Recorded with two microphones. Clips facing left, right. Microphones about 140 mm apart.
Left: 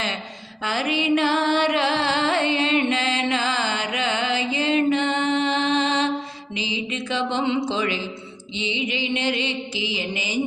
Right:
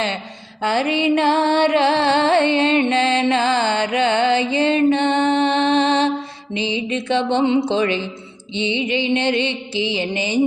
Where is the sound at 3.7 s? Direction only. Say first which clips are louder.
Right 7 dB; 30° right (ahead or behind).